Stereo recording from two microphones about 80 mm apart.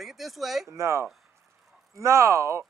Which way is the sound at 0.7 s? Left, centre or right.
Right.